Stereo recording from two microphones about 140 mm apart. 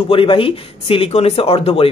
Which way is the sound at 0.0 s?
40° left (ahead or behind).